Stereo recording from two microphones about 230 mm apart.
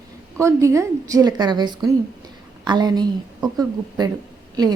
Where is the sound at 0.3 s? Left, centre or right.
Centre.